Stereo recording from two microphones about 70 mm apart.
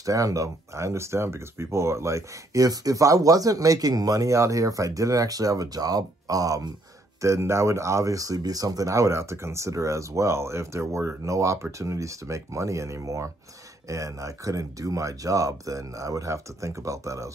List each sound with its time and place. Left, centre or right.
0.0 s speech: right
7.2 s speech: right